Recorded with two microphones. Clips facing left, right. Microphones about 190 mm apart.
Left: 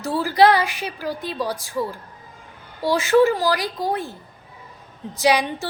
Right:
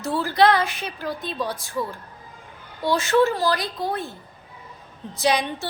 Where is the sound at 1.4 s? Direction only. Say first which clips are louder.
Left 3 dB; 35° left (ahead or behind).